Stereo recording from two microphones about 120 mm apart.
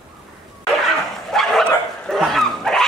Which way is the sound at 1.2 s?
5° left (ahead or behind).